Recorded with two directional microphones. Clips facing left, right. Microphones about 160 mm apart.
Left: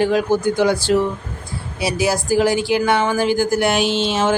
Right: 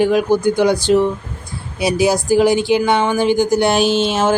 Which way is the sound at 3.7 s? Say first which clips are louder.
Right 3 dB; 45° right (ahead or behind).